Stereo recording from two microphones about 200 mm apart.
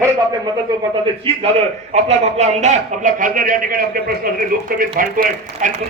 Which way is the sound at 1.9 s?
35° right (ahead or behind).